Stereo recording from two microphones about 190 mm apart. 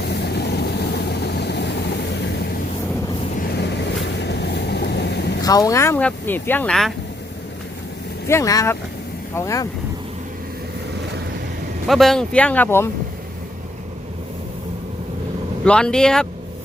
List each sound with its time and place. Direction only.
0.1 s vehicle: 60° left (ahead or behind)
5.4 s speech: 20° left (ahead or behind); by 6.9 s 5° left (ahead or behind)
8.3 s speech: 15° left (ahead or behind)
11.9 s speech: centre (ahead or behind)
15.6 s speech: 5° left (ahead or behind)